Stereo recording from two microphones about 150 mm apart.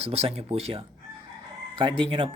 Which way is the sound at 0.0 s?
40° right (ahead or behind).